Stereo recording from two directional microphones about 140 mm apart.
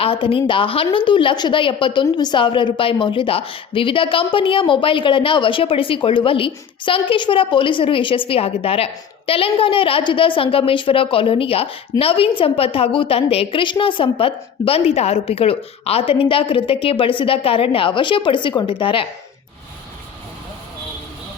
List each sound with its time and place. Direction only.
0.0 s a woman's voice: 40° left (ahead or behind)